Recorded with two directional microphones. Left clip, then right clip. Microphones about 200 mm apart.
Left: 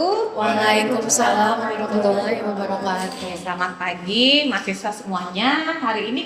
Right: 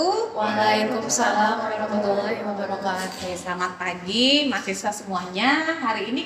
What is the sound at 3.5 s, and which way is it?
A woman's voice, 30° right (ahead or behind).